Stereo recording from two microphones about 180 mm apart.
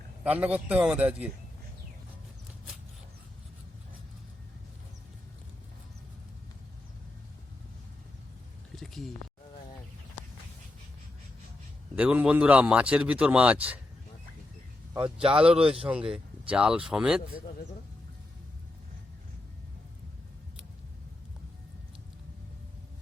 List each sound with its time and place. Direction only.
0.3 s a man's voice: 10° right (ahead or behind)
8.7 s a sound: centre (ahead or behind)
11.9 s a man's voice: 5° right (ahead or behind)
15.0 s speech: 30° right (ahead or behind)
15.9 s speech: 5° right (ahead or behind)